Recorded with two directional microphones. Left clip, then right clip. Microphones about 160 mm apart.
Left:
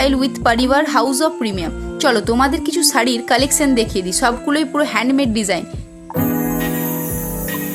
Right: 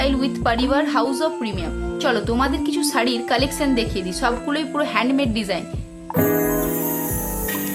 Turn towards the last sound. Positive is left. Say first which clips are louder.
# right 1 dB
turn(degrees=0)  # may be behind; listen again after turning